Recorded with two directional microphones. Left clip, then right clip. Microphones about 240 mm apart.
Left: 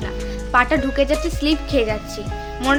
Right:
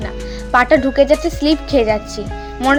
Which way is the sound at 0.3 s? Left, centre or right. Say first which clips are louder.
Right 5 dB; right.